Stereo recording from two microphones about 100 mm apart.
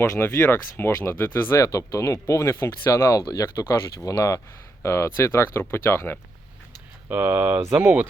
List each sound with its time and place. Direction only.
0.0 s speech: 25° left (ahead or behind)
7.1 s speech: 20° right (ahead or behind)